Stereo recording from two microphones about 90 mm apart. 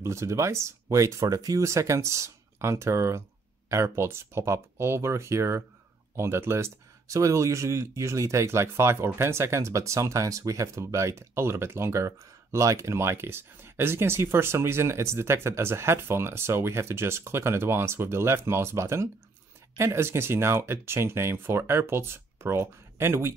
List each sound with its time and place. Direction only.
0.0 s speech: 30° right (ahead or behind)